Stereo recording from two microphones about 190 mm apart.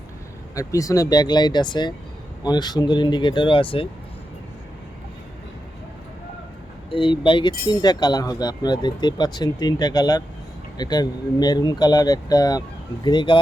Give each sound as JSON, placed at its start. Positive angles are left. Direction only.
{"t": 0.5, "sound": "speech", "side_deg": 15}
{"t": 6.9, "sound": "speech", "side_deg": 25}